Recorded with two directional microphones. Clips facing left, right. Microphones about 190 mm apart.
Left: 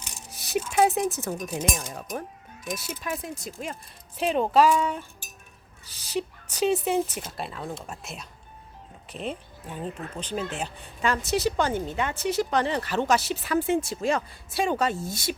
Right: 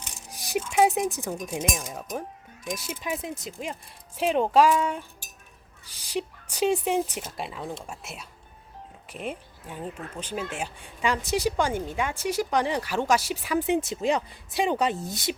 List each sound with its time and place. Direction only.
0.3 s a sound: 15° right (ahead or behind)
1.1 s speech: 15° right (ahead or behind)
1.8 s speech: centre (ahead or behind)
2.7 s speech: 15° right (ahead or behind)